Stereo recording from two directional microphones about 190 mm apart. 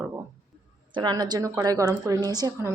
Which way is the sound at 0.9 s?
25° right (ahead or behind).